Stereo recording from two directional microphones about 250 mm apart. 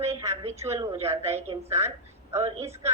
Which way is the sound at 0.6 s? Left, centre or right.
Centre.